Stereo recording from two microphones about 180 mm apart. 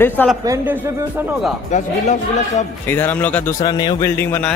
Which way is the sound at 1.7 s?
40° left (ahead or behind).